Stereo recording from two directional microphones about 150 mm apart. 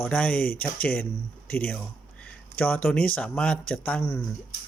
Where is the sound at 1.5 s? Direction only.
10° left (ahead or behind).